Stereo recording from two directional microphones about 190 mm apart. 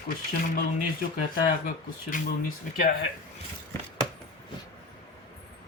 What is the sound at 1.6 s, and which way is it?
Speech, 45° left (ahead or behind).